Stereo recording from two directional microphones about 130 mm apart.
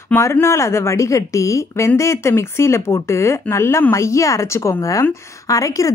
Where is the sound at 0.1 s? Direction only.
20° left (ahead or behind).